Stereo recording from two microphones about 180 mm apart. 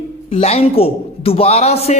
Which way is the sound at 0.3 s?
35° left (ahead or behind).